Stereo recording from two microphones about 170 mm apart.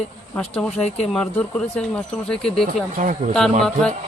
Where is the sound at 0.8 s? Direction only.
40° left (ahead or behind).